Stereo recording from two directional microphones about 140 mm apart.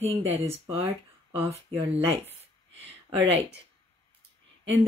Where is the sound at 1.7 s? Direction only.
15° right (ahead or behind).